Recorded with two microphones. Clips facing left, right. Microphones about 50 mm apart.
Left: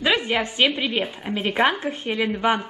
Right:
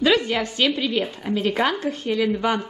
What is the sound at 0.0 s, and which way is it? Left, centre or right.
A woman's voice, centre.